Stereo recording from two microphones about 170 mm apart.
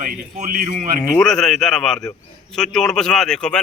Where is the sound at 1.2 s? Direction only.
5° left (ahead or behind).